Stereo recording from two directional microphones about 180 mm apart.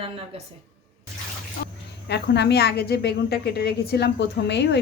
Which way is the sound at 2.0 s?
70° left (ahead or behind).